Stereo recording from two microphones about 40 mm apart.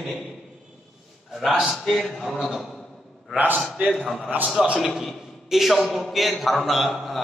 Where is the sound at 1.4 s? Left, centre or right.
Centre.